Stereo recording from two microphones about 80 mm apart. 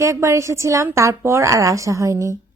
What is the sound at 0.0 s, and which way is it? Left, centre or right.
A woman's voice, right.